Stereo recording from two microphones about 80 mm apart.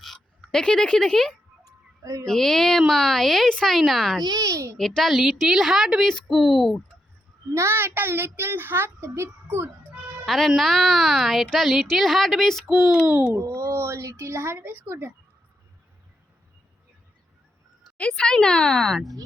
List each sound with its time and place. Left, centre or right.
0.4 s speech: centre
1.6 s music: right
2.2 s a woman's voice: centre
4.2 s a child's voice: right
4.8 s a woman's voice: centre
7.5 s a child's voice: right
10.2 s a woman's voice: centre
13.3 s speech: right
17.9 s speech: centre